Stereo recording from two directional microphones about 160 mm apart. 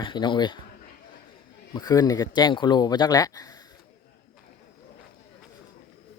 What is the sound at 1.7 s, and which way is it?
Speech, 25° left (ahead or behind).